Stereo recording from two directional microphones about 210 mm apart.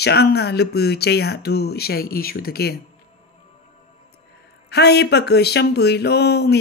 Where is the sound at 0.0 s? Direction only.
50° left (ahead or behind).